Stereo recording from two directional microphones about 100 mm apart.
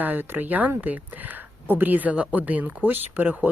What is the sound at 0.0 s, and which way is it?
Speech, 20° right (ahead or behind).